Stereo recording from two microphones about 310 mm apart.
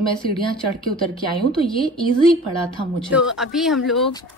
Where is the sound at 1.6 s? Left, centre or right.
Centre.